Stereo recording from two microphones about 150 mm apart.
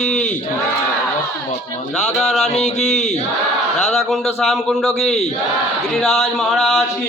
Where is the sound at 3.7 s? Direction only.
50° left (ahead or behind).